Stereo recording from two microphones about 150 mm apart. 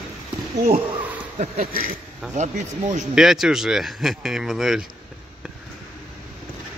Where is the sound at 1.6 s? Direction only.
75° right (ahead or behind).